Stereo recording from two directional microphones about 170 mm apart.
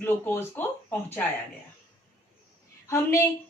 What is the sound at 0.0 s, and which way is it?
Speech, 10° left (ahead or behind).